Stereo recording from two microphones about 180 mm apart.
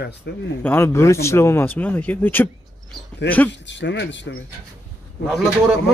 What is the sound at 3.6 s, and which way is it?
Speech, 85° left.